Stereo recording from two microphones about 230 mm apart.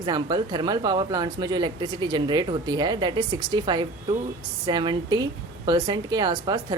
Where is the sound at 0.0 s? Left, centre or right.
Centre.